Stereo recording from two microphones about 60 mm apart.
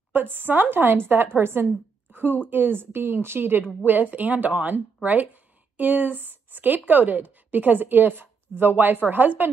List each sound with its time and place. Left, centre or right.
0.1 s a woman's voice: right